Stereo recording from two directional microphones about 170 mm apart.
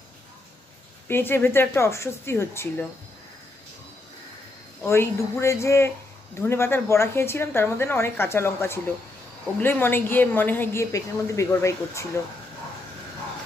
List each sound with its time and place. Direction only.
1.0 s a woman's voice: 15° left (ahead or behind)
4.8 s a woman's voice: 15° left (ahead or behind)